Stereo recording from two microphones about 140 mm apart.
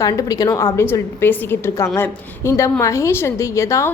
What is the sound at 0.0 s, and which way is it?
A woman's voice, 25° left (ahead or behind).